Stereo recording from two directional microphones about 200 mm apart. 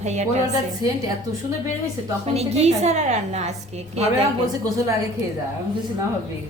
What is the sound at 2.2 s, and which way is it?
A woman's voice, 30° right (ahead or behind).